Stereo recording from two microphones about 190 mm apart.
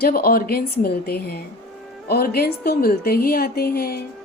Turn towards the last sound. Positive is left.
turn(degrees=55)  # may be behind; listen again after turning